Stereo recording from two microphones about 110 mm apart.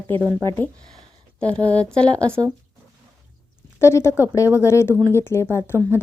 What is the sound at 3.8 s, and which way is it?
Speech, 25° left (ahead or behind).